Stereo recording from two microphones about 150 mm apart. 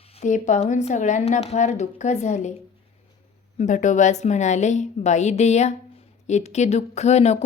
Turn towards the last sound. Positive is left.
turn(degrees=45)  # may be behind; listen again after turning